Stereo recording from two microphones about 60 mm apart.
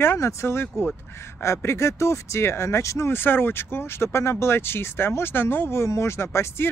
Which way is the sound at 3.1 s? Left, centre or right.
Left.